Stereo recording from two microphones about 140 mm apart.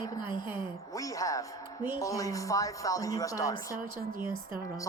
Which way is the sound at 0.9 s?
25° left (ahead or behind).